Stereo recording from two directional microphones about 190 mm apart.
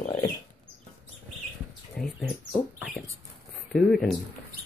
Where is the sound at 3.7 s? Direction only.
Centre (ahead or behind).